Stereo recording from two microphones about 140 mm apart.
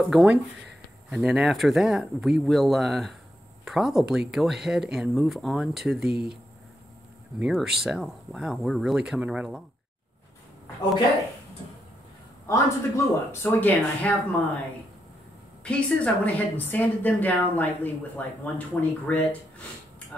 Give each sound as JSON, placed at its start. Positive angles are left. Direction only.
{"t": 0.1, "sound": "speech", "side_deg": -5}
{"t": 7.3, "sound": "speech", "side_deg": -5}
{"t": 12.4, "sound": "a woman's voice", "side_deg": 20}
{"t": 15.6, "sound": "a woman's voice", "side_deg": 10}